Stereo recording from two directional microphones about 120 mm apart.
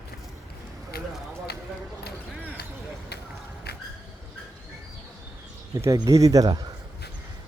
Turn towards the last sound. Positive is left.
turn(degrees=-30)  # may be behind; listen again after turning